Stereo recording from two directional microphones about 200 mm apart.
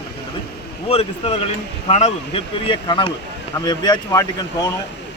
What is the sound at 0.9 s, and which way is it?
A man's voice, 30° left (ahead or behind).